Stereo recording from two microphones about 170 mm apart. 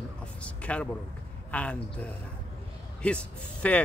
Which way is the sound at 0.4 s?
5° left (ahead or behind).